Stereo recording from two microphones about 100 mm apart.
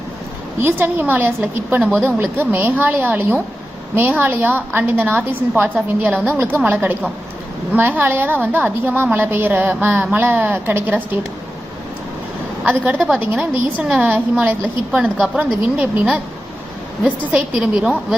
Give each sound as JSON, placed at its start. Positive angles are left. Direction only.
{"t": 0.6, "sound": "a woman's voice", "side_deg": -20}
{"t": 12.6, "sound": "a woman's voice", "side_deg": -15}